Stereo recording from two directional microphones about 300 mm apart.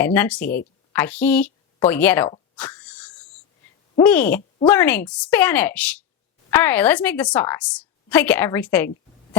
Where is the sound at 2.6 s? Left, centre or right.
Centre.